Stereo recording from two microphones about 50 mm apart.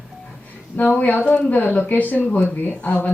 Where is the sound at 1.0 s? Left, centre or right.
Left.